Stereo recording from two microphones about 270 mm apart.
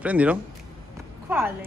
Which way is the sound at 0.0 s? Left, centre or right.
Centre.